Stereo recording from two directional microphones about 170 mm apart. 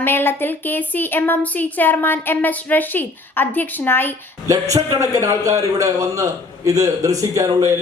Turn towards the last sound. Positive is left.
turn(degrees=-20)  # may be behind; listen again after turning